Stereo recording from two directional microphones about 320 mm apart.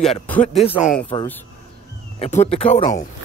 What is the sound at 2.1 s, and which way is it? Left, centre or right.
Speech, centre.